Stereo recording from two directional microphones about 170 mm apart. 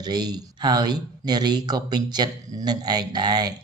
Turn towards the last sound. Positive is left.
turn(degrees=-25)  # may be behind; listen again after turning